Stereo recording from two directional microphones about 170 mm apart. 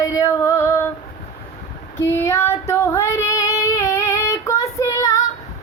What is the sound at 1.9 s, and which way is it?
Child singing, 15° left (ahead or behind).